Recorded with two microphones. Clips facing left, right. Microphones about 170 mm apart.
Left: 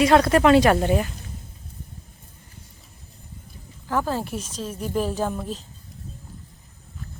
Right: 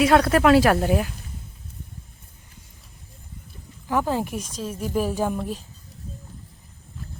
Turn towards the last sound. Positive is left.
turn(degrees=-10)  # may be behind; listen again after turning